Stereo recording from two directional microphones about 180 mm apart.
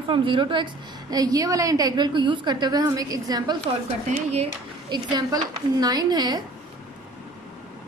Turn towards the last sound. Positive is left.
turn(degrees=-20)  # may be behind; listen again after turning